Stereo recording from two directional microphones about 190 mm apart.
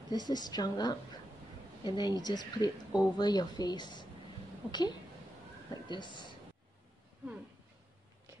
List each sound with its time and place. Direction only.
0.1 s speech: 20° left (ahead or behind)